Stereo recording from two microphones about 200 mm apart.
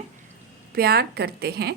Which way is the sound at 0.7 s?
50° right (ahead or behind).